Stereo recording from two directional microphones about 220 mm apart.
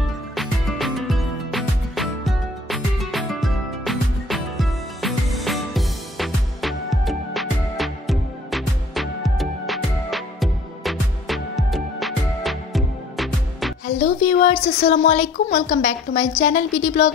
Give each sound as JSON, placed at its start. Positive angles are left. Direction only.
{"t": 0.4, "sound": "music", "side_deg": 0}
{"t": 14.2, "sound": "a woman's voice", "side_deg": 35}